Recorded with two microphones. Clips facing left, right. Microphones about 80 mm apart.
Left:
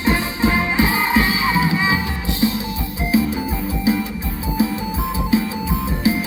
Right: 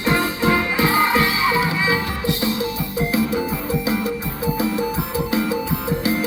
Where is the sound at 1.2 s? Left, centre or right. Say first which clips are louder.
Left 1 dB; left.